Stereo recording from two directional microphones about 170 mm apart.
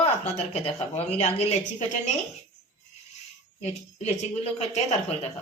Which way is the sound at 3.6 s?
40° left (ahead or behind).